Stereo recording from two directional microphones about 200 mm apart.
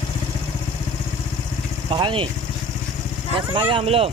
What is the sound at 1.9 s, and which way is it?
Speech, 25° right (ahead or behind).